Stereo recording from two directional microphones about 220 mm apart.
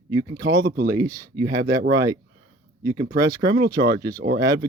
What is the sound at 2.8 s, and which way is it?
Speech, 15° right (ahead or behind).